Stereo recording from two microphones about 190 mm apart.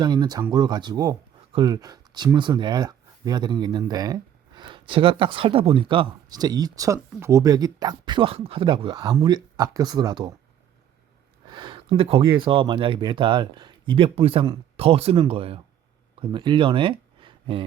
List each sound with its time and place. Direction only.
0.0 s speech: 20° right (ahead or behind)
11.4 s speech: 25° right (ahead or behind)